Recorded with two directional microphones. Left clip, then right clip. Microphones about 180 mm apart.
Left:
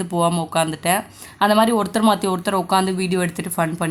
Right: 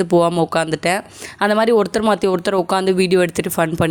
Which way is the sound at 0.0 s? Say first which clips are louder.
Right 6 dB; 35° right (ahead or behind).